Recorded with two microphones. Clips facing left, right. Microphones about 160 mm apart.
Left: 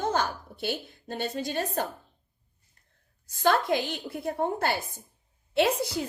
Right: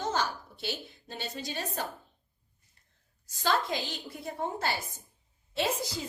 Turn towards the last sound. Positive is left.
turn(degrees=60)  # may be behind; listen again after turning